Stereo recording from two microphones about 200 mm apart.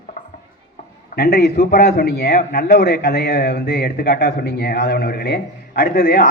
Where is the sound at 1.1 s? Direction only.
50° left (ahead or behind).